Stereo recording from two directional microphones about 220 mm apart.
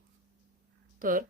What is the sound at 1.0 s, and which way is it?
Speech, 40° right (ahead or behind).